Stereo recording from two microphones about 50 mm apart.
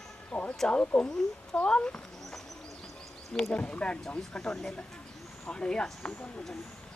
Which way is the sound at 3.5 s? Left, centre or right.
Left.